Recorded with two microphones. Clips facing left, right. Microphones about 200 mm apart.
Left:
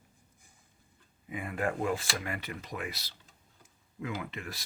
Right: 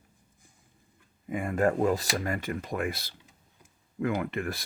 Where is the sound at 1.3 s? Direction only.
45° right (ahead or behind).